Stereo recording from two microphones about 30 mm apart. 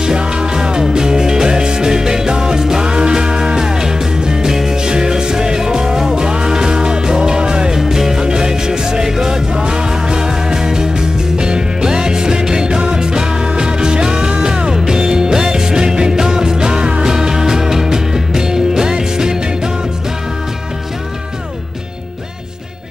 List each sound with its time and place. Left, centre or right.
0.0 s music: right
4.5 s music: centre
7.7 s music: centre
8.2 s music: right